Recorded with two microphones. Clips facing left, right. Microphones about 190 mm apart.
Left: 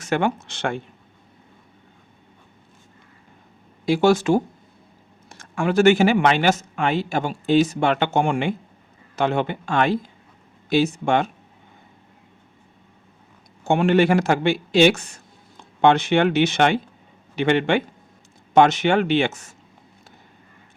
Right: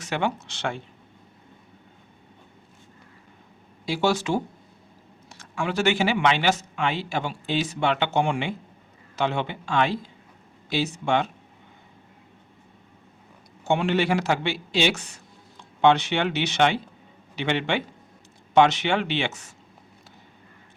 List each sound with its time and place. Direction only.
0.0 s speech: 50° left (ahead or behind)
3.8 s speech: 50° left (ahead or behind)
13.7 s a man's voice: 50° left (ahead or behind)